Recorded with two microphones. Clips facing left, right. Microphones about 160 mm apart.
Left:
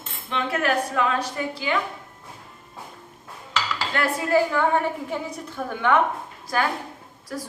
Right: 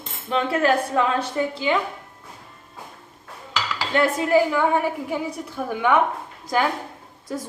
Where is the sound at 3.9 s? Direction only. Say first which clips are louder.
Right 4 dB; 20° right (ahead or behind).